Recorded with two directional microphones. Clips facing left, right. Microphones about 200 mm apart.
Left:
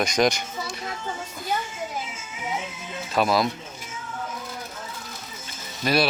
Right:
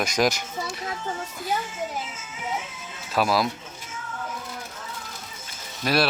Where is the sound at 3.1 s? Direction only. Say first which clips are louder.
Left 1 dB; 5° right (ahead or behind).